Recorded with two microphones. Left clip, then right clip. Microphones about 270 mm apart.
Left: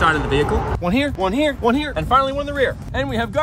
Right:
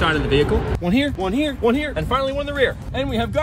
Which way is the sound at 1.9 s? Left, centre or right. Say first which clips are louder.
Left 4 dB; centre.